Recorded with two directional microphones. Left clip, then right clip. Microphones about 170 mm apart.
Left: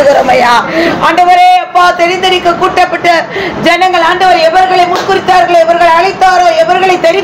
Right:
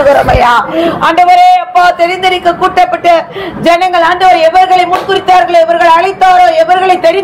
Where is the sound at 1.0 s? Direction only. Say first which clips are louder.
Right 1 dB; 25° right (ahead or behind).